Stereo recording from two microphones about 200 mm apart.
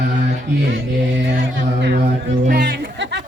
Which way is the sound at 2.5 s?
50° right (ahead or behind).